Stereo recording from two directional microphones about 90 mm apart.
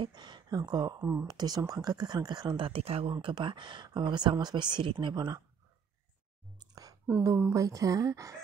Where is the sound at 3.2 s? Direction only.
65° right (ahead or behind).